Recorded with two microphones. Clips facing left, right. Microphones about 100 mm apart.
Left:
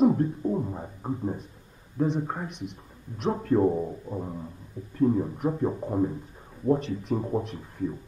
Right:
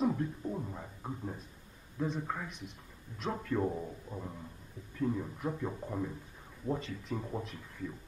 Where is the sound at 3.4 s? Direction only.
30° left (ahead or behind).